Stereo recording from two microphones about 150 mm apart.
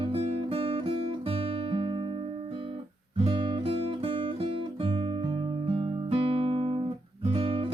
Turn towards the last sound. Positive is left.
turn(degrees=-35)  # may be behind; listen again after turning